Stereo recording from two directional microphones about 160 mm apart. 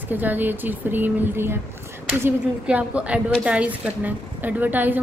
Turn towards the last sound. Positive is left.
turn(degrees=-10)  # may be behind; listen again after turning